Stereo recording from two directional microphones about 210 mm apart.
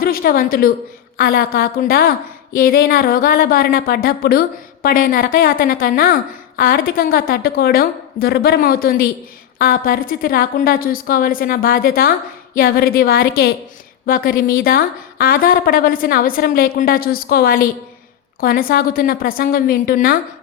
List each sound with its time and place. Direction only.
0.0 s a woman's voice: 45° left (ahead or behind)